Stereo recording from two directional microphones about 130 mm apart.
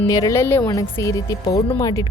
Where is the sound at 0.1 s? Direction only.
25° left (ahead or behind).